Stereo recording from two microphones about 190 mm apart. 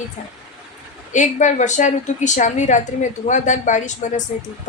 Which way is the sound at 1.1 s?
40° left (ahead or behind).